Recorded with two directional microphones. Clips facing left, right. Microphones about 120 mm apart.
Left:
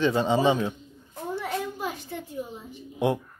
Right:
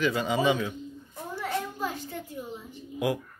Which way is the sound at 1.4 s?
15° left (ahead or behind).